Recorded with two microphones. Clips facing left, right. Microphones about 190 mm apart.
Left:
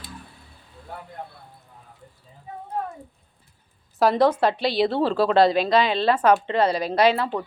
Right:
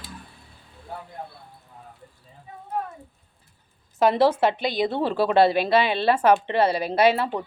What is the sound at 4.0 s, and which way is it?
Speech, 5° right (ahead or behind).